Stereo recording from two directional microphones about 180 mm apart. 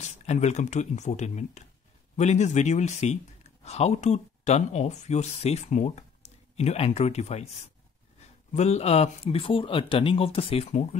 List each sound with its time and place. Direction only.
0.0 s speech: 40° left (ahead or behind)